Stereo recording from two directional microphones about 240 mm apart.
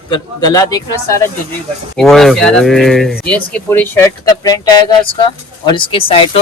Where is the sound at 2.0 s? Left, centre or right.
Centre.